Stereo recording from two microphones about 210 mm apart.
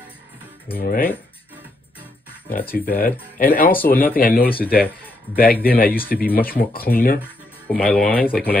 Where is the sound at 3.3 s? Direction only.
40° left (ahead or behind).